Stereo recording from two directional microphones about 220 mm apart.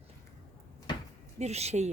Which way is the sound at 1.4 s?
30° right (ahead or behind).